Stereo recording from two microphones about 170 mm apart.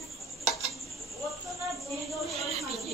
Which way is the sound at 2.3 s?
40° right (ahead or behind).